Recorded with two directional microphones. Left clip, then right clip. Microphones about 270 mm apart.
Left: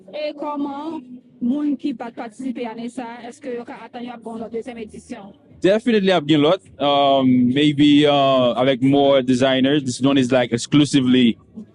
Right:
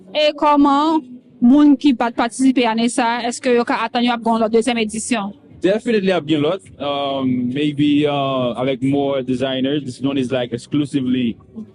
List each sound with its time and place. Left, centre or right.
0.1 s speech: right
1.5 s speech: right
5.6 s speech: left